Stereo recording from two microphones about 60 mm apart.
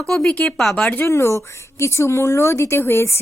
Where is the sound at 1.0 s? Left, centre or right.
Left.